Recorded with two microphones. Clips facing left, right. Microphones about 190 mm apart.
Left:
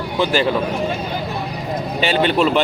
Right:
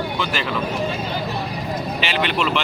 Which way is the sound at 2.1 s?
35° left (ahead or behind).